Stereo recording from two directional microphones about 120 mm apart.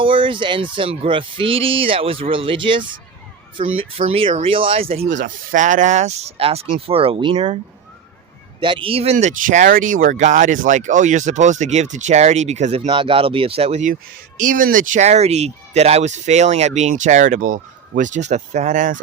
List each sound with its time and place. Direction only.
0.0 s speech: 45° right (ahead or behind)
5.0 s speech: 90° right; by 7.6 s 50° right (ahead or behind)
8.6 s speech: 45° right (ahead or behind)
9.1 s speech: 90° right; by 12.9 s 70° right (ahead or behind)
12.9 s speech: 45° right (ahead or behind); by 13.9 s 65° right (ahead or behind)
14.3 s speech: 90° right